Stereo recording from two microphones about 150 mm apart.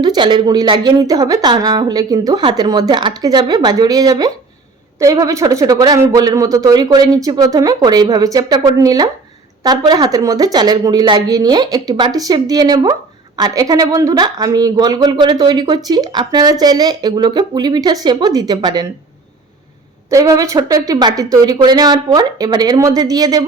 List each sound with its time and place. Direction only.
0.0 s a woman's voice: 30° right (ahead or behind)
20.1 s a woman's voice: 20° right (ahead or behind)